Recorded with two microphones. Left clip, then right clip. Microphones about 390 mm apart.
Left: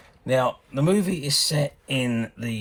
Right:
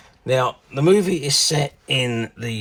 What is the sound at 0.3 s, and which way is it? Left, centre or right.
Speech, centre.